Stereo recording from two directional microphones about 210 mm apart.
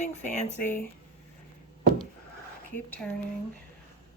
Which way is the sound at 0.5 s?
10° left (ahead or behind).